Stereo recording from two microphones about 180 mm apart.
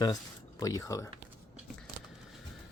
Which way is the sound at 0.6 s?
20° left (ahead or behind).